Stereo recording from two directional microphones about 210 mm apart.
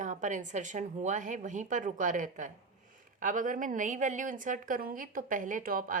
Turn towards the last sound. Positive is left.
turn(degrees=-40)  # may be behind; listen again after turning